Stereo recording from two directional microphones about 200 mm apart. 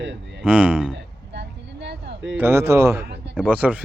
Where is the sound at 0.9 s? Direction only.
60° right (ahead or behind).